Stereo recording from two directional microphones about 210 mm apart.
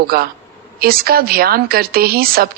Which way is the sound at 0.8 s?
45° right (ahead or behind).